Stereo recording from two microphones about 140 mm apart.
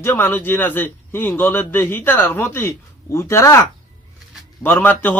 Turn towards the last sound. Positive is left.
turn(degrees=15)  # may be behind; listen again after turning